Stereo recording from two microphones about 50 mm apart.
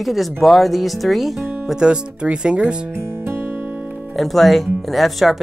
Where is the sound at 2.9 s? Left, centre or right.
Right.